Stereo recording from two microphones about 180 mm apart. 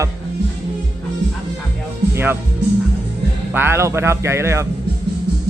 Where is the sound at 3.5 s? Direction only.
15° right (ahead or behind).